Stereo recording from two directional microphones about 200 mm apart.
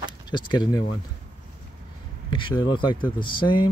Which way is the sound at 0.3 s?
20° left (ahead or behind).